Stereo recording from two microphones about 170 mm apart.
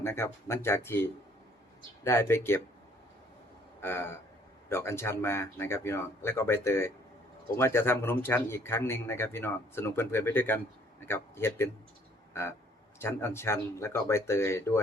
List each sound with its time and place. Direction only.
0.0 s speech: 15° left (ahead or behind)
3.8 s a sound: 15° left (ahead or behind)
4.7 s speech: 15° left (ahead or behind)